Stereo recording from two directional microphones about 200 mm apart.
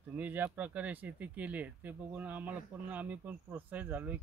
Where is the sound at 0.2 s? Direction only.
10° right (ahead or behind).